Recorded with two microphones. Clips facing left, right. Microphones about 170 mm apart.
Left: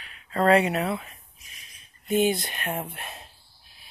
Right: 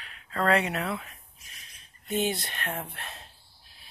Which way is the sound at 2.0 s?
15° left (ahead or behind).